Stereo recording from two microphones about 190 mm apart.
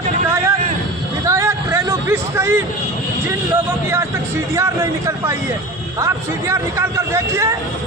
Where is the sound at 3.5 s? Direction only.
15° right (ahead or behind).